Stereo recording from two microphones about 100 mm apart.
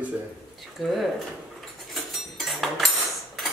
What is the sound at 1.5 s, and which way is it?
Cutlery, centre (ahead or behind).